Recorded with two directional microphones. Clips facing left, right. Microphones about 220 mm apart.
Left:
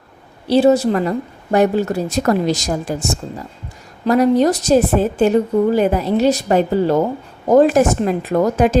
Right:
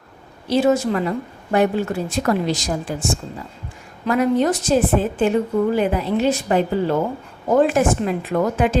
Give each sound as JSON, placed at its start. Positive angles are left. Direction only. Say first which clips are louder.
{"t": 0.4, "sound": "a woman's voice", "louder": "left 4 dB", "side_deg": 35}